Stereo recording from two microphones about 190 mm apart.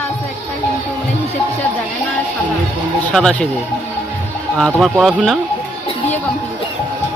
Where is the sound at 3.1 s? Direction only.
5° left (ahead or behind).